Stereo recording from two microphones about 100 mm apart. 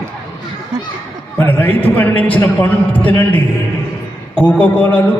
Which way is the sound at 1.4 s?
20° left (ahead or behind).